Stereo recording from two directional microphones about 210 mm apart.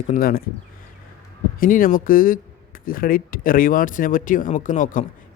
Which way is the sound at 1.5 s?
40° left (ahead or behind).